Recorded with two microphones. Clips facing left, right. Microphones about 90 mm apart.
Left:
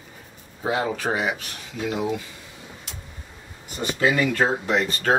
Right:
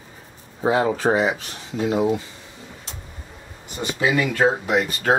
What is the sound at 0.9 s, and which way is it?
Speech, 30° right (ahead or behind).